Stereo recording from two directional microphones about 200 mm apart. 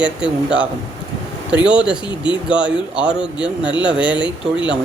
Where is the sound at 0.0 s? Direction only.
5° right (ahead or behind).